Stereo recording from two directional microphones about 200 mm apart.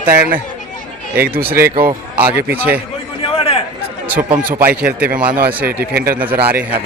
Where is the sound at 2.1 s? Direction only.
10° right (ahead or behind).